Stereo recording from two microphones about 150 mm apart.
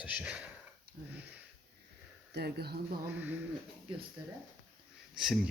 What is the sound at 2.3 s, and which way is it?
Speech, 90° right.